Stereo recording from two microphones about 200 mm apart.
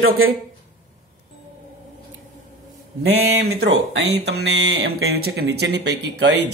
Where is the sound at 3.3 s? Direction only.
55° right (ahead or behind).